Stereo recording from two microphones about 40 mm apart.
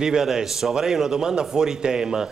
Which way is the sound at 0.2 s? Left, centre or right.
Centre.